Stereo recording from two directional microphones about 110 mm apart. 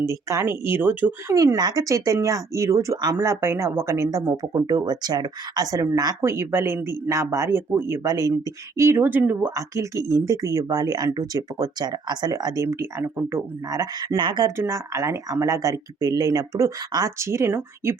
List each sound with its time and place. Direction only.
0.0 s speech: 30° right (ahead or behind)
1.3 s speech: 25° right (ahead or behind)
6.2 s speech: 25° right (ahead or behind)
9.6 s speech: 30° right (ahead or behind)
12.6 s speech: 20° right (ahead or behind)
14.2 s speech: 45° right (ahead or behind)
14.4 s speech: 25° right (ahead or behind)